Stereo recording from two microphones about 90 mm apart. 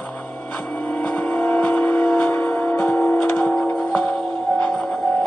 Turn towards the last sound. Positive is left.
turn(degrees=25)  # may be behind; listen again after turning